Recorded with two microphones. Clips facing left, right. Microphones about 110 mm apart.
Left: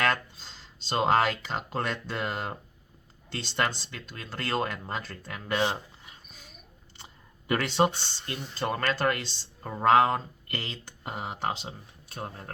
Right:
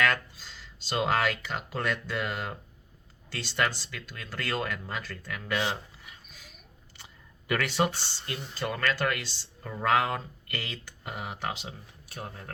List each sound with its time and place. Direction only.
0.0 s speech: 30° left (ahead or behind)
5.7 s a sound: 30° left (ahead or behind)
7.9 s speech: 10° right (ahead or behind)
8.5 s speech: 30° left (ahead or behind)